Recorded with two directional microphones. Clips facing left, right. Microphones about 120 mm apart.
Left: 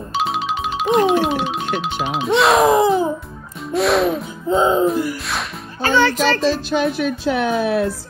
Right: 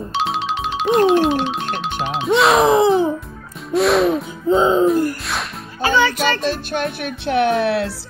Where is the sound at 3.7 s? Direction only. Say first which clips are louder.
Right 2 dB; centre (ahead or behind).